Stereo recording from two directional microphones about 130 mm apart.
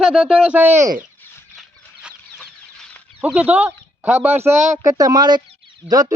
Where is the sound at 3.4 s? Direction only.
10° right (ahead or behind).